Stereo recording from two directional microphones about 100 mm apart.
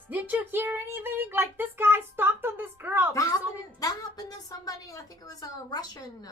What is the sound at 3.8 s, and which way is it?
Speech, 35° left (ahead or behind).